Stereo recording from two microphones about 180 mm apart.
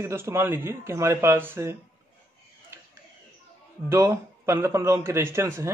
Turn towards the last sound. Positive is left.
turn(degrees=-15)  # may be behind; listen again after turning